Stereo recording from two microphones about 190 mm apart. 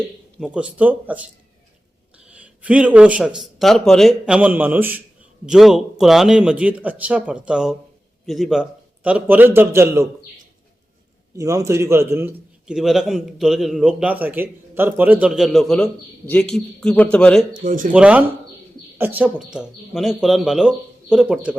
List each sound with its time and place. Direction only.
0.3 s a man's voice: 5° right (ahead or behind)
11.3 s a man's voice: 15° right (ahead or behind); by 17.4 s 5° left (ahead or behind)
17.5 s speech: 45° right (ahead or behind)
17.9 s a man's voice: 5° right (ahead or behind)